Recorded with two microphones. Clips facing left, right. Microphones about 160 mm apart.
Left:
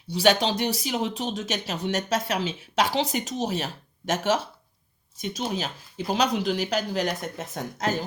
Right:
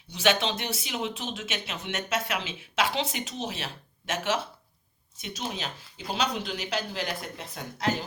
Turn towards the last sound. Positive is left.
turn(degrees=45)  # may be behind; listen again after turning